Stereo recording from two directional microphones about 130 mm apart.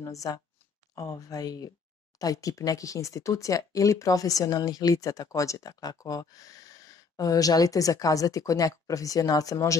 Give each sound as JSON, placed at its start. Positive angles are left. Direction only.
{"t": 0.0, "sound": "speech", "side_deg": 25}